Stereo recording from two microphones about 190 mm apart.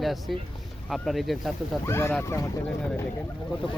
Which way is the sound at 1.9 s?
10° left (ahead or behind).